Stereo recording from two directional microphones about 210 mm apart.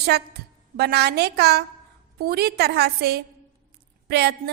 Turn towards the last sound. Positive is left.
turn(degrees=-50)  # may be behind; listen again after turning